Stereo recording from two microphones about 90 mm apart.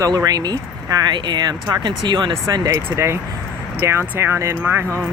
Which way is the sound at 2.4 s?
45° right (ahead or behind).